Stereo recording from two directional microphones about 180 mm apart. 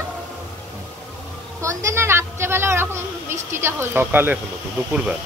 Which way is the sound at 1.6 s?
15° right (ahead or behind).